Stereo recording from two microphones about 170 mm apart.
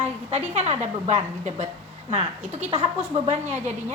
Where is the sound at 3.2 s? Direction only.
40° right (ahead or behind).